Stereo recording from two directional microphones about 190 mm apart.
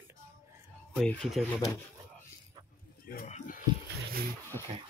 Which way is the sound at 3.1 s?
50° left (ahead or behind).